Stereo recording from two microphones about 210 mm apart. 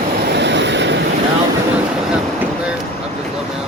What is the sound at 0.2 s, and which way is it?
Vehicle, 55° right (ahead or behind).